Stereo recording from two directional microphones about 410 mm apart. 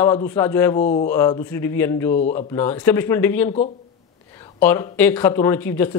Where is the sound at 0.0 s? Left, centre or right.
Centre.